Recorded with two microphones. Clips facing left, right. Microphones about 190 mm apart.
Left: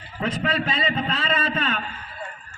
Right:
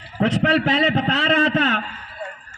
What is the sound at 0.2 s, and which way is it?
A man's voice, 75° right (ahead or behind).